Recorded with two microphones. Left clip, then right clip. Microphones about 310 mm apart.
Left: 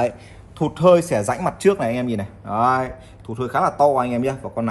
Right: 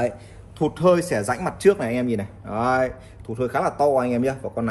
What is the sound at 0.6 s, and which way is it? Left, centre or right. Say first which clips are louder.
A man's voice: left 4 dB; centre.